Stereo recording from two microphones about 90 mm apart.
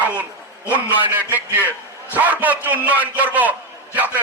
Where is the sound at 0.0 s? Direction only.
15° right (ahead or behind).